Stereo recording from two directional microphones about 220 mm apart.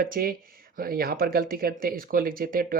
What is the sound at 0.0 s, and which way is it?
Speech, 40° right (ahead or behind).